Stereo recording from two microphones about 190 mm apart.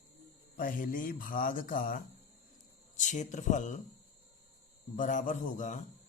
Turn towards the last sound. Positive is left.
turn(degrees=40)  # may be behind; listen again after turning